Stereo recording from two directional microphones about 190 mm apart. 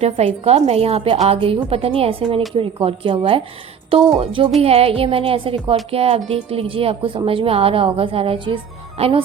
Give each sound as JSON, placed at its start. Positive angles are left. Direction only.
{"t": 0.0, "sound": "a woman's voice", "side_deg": -35}